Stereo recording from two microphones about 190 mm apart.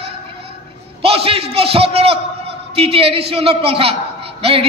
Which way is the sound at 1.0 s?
30° right (ahead or behind).